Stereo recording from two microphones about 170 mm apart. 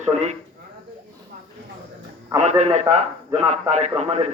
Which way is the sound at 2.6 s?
40° right (ahead or behind).